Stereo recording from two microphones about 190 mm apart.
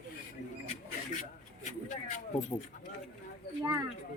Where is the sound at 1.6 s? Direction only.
40° left (ahead or behind).